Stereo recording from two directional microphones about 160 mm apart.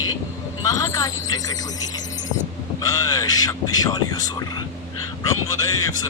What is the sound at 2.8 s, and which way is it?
Speech, 20° left (ahead or behind).